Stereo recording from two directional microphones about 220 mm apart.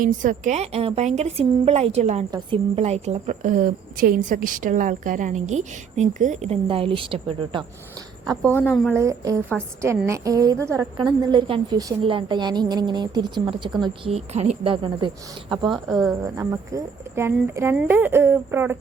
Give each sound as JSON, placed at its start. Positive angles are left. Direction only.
{"t": 0.0, "sound": "a woman's voice", "side_deg": -35}
{"t": 8.7, "sound": "speech", "side_deg": 0}
{"t": 9.0, "sound": "a woman's voice", "side_deg": -15}
{"t": 15.9, "sound": "speech", "side_deg": 0}
{"t": 16.2, "sound": "speech", "side_deg": -15}